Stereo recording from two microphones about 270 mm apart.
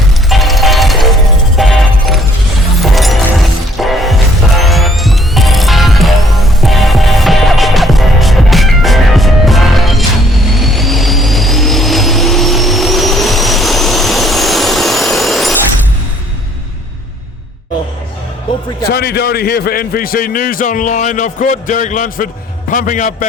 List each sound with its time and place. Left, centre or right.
0.3 s music: centre
10.5 s vehicle: centre
18.8 s a man's voice: left